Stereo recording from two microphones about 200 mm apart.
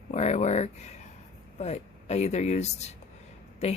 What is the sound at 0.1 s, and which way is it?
Speech, 35° left (ahead or behind).